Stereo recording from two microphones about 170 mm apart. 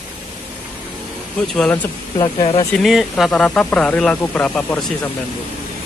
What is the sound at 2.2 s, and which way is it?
Speech, 35° left (ahead or behind).